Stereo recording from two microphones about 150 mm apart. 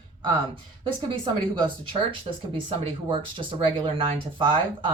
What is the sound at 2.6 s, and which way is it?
A woman's voice, 35° right (ahead or behind).